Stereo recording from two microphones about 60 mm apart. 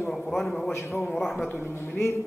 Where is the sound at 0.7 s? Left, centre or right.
Left.